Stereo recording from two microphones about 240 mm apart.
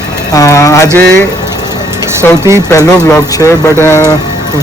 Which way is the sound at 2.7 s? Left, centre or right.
Centre.